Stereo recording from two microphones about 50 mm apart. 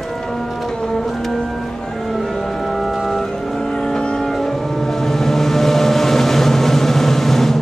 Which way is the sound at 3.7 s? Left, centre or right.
Centre.